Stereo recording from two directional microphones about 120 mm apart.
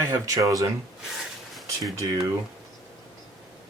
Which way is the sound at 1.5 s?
Centre (ahead or behind).